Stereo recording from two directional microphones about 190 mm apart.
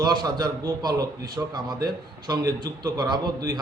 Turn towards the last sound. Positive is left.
turn(degrees=-20)  # may be behind; listen again after turning